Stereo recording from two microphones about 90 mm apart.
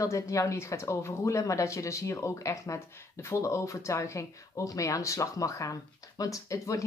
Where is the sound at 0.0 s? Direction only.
35° left (ahead or behind).